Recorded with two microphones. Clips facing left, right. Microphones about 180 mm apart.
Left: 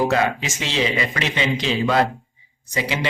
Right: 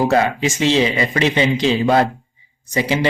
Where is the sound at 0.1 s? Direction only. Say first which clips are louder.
Right 4 dB; 30° right (ahead or behind).